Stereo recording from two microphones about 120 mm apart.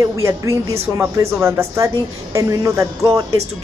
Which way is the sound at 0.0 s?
25° right (ahead or behind).